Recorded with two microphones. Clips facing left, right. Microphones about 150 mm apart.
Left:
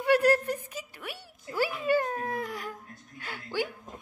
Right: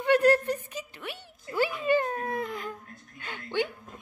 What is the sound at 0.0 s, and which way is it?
A woman's voice, 10° left (ahead or behind).